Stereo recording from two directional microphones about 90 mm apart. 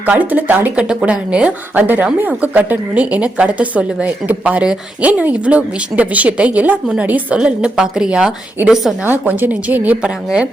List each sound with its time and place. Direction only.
0.0 s a woman's voice: 15° right (ahead or behind)
9.0 s a woman's voice: 20° right (ahead or behind)